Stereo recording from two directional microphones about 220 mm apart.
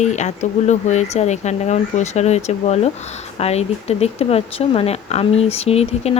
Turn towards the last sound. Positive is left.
turn(degrees=30)  # may be behind; listen again after turning